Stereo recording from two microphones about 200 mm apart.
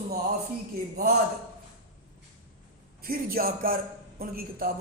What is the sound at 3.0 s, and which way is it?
A man's voice, 45° right (ahead or behind).